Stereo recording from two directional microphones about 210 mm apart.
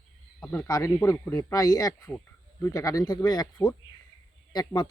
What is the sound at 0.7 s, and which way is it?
Speech, 15° left (ahead or behind).